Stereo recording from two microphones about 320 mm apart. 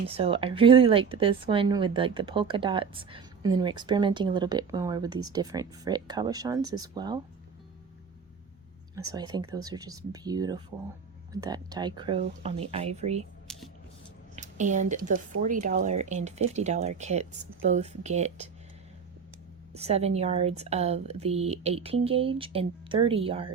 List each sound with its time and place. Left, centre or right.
0.0 s a woman's voice: centre
9.0 s a woman's voice: centre
13.5 s a sound: centre
14.3 s a woman's voice: right
19.7 s speech: centre